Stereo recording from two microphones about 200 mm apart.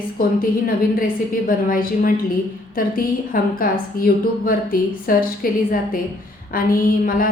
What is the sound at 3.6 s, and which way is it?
A woman's voice, 45° left (ahead or behind).